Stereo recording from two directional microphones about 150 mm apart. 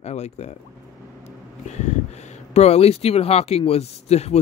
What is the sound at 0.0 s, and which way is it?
Speech, 45° left (ahead or behind).